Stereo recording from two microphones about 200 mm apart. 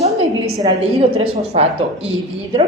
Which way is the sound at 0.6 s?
30° right (ahead or behind).